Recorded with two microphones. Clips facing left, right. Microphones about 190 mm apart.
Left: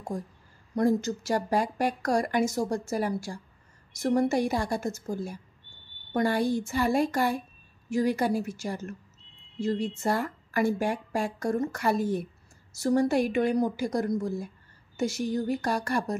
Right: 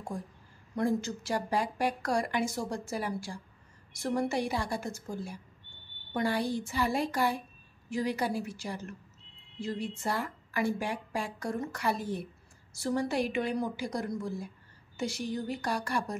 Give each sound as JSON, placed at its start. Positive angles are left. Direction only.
{"t": 0.7, "sound": "speech", "side_deg": 40}